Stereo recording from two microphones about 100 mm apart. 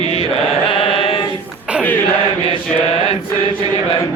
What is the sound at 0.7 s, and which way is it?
Chant, 75° left (ahead or behind).